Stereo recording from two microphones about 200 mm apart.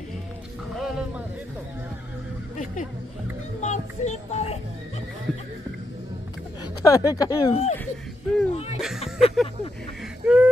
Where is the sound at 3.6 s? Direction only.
35° left (ahead or behind).